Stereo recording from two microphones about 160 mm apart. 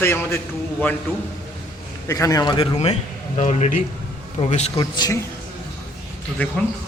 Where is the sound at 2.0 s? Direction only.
20° left (ahead or behind); by 4.7 s 40° left (ahead or behind).